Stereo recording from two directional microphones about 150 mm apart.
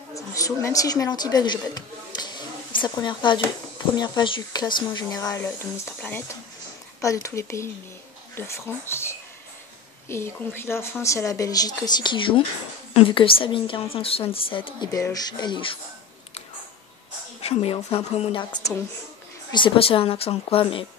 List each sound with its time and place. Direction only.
0.1 s a woman's voice: 20° left (ahead or behind)
14.9 s a woman's voice: 25° left (ahead or behind)
17.4 s a woman's voice: 40° left (ahead or behind)